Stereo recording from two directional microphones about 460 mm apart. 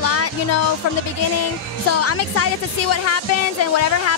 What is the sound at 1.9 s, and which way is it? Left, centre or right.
Speech, left.